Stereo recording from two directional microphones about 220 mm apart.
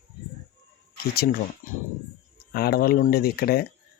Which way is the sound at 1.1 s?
45° left (ahead or behind).